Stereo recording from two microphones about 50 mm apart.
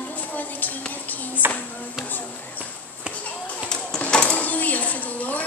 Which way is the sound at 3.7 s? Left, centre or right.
Centre.